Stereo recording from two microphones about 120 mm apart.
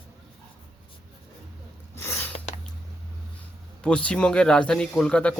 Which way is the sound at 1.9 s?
20° left (ahead or behind).